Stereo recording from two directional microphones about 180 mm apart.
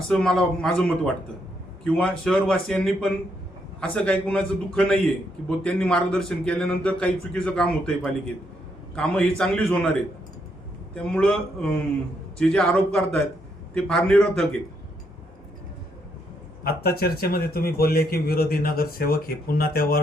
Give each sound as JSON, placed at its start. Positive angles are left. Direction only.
{"t": 0.1, "sound": "a man's voice", "side_deg": 5}
{"t": 10.9, "sound": "a man's voice", "side_deg": 5}
{"t": 16.6, "sound": "speech", "side_deg": 60}